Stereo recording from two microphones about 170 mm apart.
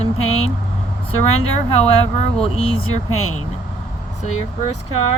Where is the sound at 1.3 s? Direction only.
35° left (ahead or behind).